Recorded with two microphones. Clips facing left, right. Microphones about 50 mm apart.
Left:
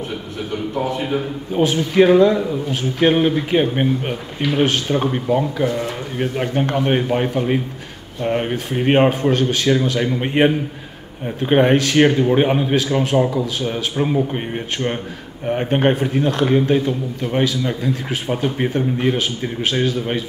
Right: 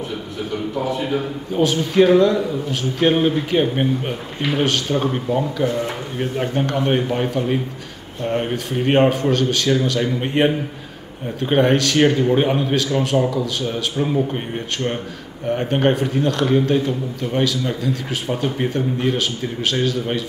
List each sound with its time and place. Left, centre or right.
1.1 s a man's voice: centre
15.4 s a man's voice: centre